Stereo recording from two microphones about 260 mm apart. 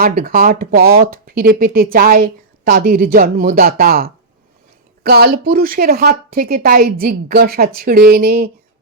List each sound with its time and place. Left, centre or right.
0.0 s speech: right